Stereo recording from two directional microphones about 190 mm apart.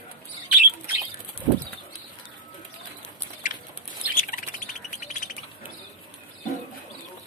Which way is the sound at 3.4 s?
45° left (ahead or behind).